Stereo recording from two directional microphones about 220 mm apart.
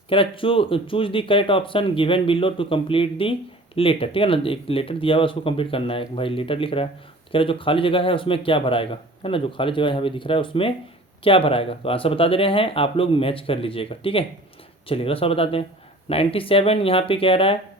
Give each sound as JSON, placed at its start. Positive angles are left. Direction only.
{"t": 0.1, "sound": "a man's voice", "side_deg": 25}